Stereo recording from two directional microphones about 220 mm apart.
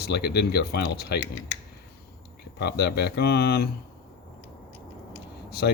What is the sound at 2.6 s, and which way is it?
Speech, 50° left (ahead or behind).